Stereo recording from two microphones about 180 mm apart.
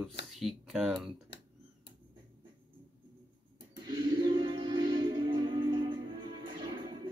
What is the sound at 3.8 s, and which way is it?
Music, 25° right (ahead or behind).